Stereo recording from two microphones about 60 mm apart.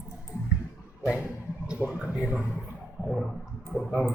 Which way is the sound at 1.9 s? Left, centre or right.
Centre.